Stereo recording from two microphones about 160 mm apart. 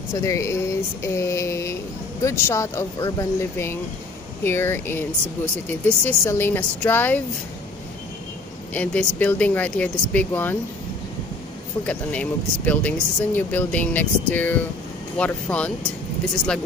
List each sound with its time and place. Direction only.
0.1 s speech: 20° left (ahead or behind)
8.7 s speech: 10° left (ahead or behind)
11.8 s speech: 10° left (ahead or behind)